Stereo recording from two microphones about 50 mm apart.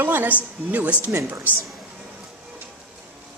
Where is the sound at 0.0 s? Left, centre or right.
Right.